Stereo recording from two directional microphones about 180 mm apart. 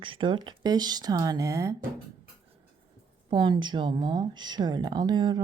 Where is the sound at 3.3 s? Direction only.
25° right (ahead or behind).